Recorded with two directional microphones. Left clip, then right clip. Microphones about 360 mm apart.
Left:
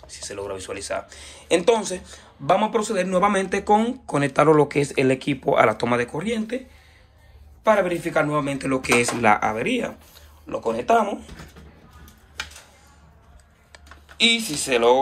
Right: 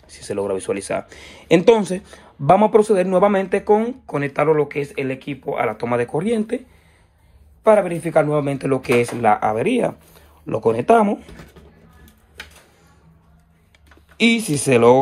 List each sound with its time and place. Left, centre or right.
0.1 s speech: centre
7.6 s speech: centre
14.1 s speech: centre